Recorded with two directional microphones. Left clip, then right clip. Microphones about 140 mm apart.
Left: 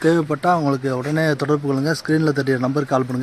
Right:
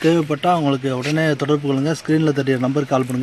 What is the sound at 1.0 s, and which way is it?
A man's voice, 25° right (ahead or behind).